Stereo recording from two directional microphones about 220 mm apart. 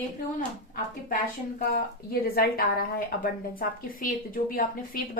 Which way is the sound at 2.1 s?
45° left (ahead or behind).